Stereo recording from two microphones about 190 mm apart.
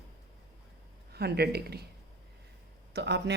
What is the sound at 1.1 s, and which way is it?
Speech, 55° right (ahead or behind).